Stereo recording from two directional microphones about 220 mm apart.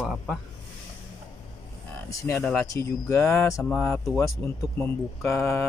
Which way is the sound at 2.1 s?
15° left (ahead or behind).